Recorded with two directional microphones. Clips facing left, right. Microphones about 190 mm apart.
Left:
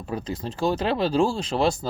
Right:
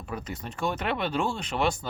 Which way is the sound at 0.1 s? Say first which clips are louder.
Left 6 dB; 30° left (ahead or behind).